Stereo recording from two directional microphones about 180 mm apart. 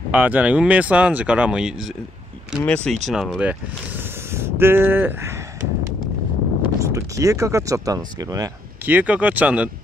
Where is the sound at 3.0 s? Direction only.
Centre (ahead or behind).